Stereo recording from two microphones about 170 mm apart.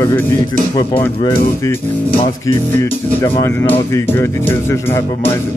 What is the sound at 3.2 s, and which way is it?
Speech, 15° left (ahead or behind).